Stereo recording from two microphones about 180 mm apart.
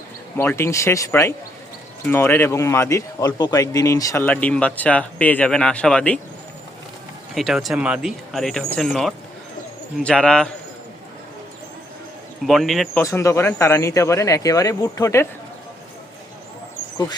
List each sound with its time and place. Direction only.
0.3 s speech: 15° left (ahead or behind)
7.3 s speech: centre (ahead or behind)
12.5 s speech: centre (ahead or behind)
13.0 s speech: 15° left (ahead or behind)